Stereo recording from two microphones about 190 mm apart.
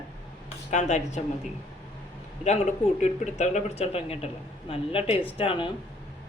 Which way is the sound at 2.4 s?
35° left (ahead or behind).